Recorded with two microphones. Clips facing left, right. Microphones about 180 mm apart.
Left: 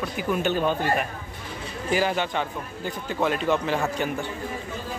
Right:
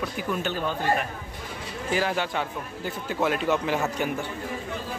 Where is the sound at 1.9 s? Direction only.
Centre (ahead or behind).